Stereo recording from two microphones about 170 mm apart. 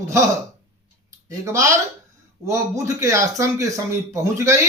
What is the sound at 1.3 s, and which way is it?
Speech, 15° right (ahead or behind).